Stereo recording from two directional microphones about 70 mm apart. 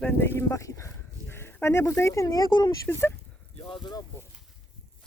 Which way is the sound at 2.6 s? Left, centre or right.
Left.